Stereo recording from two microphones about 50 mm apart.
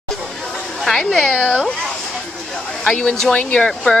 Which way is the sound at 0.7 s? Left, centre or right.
Centre.